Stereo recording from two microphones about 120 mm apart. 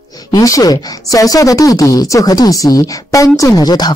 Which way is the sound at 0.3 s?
30° left (ahead or behind).